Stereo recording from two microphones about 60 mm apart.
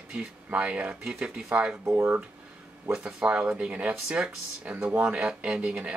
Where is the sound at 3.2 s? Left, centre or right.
Right.